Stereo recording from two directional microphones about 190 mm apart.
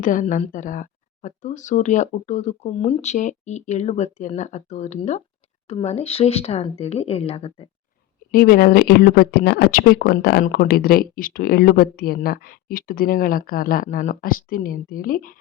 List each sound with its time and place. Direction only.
0.0 s speech: 45° left (ahead or behind)
8.3 s speech: 50° left (ahead or behind)